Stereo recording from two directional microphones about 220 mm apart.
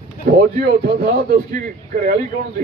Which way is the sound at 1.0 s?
40° right (ahead or behind).